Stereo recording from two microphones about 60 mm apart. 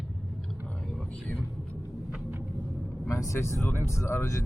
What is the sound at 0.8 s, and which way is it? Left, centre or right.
Vehicle, centre.